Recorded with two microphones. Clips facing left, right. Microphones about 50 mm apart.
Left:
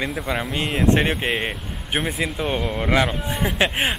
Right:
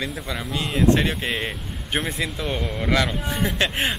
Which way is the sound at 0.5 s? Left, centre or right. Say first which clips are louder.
Right 1 dB; left.